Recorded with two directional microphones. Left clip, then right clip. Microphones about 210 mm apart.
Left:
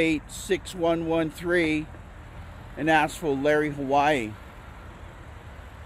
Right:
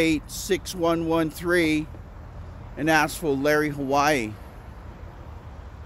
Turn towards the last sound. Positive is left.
turn(degrees=10)  # may be behind; listen again after turning